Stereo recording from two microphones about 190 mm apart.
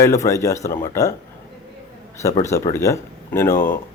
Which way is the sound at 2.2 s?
15° left (ahead or behind).